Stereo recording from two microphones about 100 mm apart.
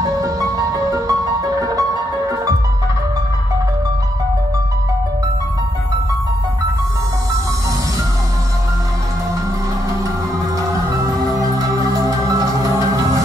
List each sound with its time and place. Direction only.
0.0 s music: 35° right (ahead or behind)
11.0 s music: 35° right (ahead or behind)